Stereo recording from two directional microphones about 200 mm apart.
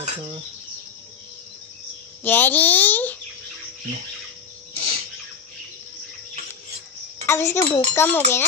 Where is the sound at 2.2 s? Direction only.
10° left (ahead or behind).